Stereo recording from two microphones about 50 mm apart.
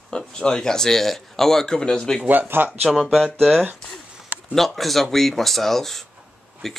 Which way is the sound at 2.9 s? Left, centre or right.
Centre.